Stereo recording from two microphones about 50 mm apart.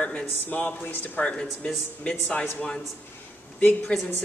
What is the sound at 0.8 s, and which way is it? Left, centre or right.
Speech, left.